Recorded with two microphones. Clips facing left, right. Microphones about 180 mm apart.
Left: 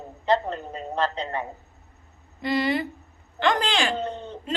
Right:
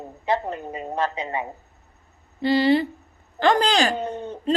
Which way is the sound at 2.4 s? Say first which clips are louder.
Right 6 dB; 30° right (ahead or behind).